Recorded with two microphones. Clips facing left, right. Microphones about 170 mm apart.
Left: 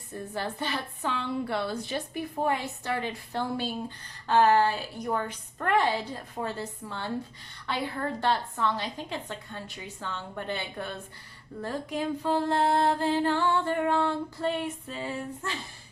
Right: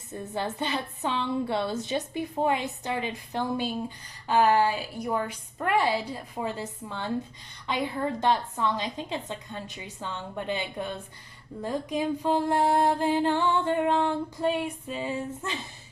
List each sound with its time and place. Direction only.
0.1 s a woman's voice: 20° right (ahead or behind)